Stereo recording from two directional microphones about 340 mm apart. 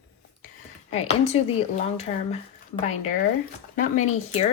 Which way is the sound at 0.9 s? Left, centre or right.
Centre.